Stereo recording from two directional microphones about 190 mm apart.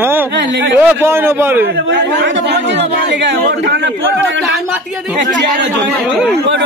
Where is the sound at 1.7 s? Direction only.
65° right (ahead or behind).